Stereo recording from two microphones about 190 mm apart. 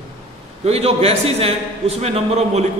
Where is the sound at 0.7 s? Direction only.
35° right (ahead or behind).